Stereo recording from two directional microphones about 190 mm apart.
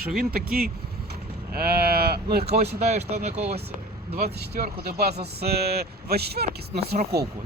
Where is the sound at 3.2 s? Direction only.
35° right (ahead or behind).